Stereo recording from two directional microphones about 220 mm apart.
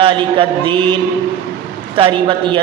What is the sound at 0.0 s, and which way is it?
Speech, 25° right (ahead or behind).